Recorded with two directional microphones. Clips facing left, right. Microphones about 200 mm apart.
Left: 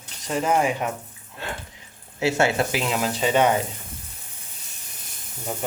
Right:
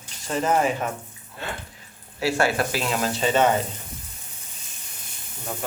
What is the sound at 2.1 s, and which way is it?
Speech, 20° left (ahead or behind).